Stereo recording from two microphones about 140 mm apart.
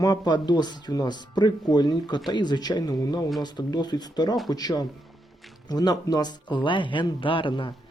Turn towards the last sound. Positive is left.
turn(degrees=35)  # may be behind; listen again after turning